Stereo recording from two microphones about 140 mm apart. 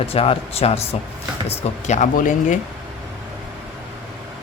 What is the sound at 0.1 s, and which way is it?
Speech, 45° left (ahead or behind).